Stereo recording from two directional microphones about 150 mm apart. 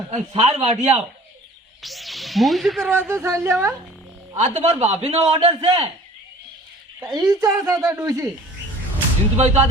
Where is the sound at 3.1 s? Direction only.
15° right (ahead or behind).